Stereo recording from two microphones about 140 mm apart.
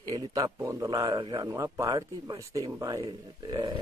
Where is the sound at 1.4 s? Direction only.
25° right (ahead or behind).